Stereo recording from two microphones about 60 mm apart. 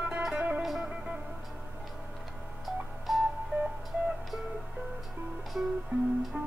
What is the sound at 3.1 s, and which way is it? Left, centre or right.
Music, centre.